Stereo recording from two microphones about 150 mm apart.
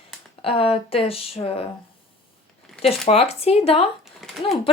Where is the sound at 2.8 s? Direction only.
45° left (ahead or behind).